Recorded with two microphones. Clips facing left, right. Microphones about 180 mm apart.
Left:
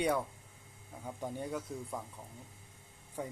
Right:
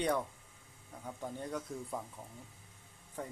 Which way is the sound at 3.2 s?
10° left (ahead or behind).